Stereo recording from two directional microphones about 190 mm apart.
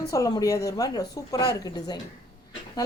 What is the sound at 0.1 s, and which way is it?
A woman's voice, 20° left (ahead or behind).